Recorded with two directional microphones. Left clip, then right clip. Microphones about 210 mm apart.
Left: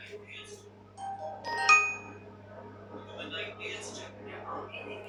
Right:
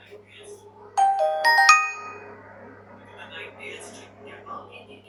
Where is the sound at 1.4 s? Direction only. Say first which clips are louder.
Right 7 dB; 45° right (ahead or behind).